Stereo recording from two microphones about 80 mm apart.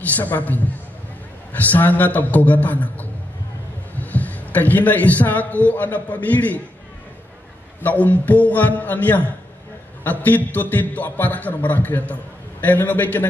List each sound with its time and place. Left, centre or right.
0.0 s a man's voice: left
7.8 s a man's voice: centre